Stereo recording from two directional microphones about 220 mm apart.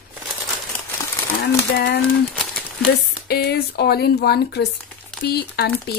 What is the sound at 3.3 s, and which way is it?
Speech, 45° left (ahead or behind).